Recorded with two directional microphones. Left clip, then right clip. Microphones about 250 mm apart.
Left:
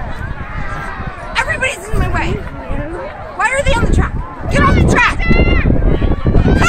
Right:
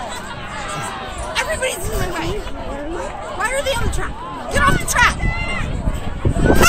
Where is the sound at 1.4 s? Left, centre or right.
Centre.